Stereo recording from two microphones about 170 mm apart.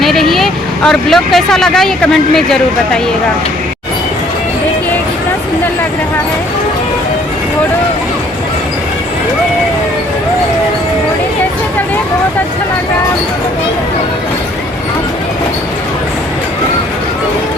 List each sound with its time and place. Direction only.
0.0 s speech: centre (ahead or behind)